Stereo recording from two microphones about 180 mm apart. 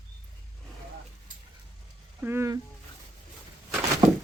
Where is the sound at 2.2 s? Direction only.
15° right (ahead or behind).